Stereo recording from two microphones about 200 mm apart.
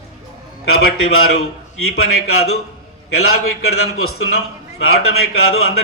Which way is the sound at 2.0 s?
90° left.